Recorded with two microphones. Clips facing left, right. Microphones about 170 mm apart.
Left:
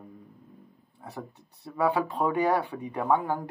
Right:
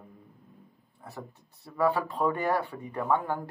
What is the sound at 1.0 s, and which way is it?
Speech, 15° left (ahead or behind).